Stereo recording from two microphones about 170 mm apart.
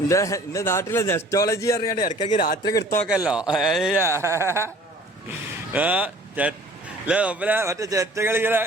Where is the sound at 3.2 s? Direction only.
5° right (ahead or behind).